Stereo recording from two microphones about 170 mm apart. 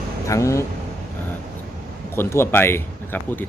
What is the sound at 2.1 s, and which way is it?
Speech, 15° left (ahead or behind).